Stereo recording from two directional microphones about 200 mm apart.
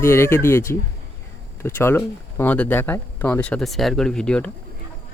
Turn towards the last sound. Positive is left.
turn(degrees=5)  # may be behind; listen again after turning